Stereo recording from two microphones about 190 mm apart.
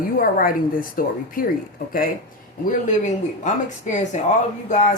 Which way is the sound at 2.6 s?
40° left (ahead or behind).